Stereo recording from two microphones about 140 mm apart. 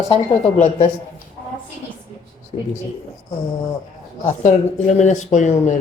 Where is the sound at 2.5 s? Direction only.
50° left (ahead or behind).